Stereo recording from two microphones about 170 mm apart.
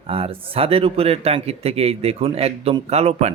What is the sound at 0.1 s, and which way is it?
Speech, 35° right (ahead or behind).